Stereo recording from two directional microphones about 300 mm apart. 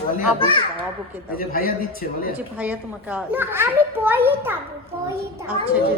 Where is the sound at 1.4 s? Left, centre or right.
Left.